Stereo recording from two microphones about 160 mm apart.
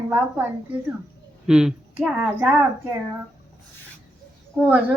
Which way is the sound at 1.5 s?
5° right (ahead or behind).